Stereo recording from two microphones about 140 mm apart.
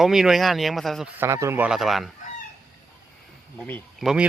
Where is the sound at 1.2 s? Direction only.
20° right (ahead or behind).